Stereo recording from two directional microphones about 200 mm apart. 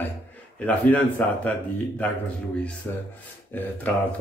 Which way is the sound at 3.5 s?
10° left (ahead or behind).